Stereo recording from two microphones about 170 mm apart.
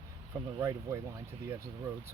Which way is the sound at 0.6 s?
15° right (ahead or behind).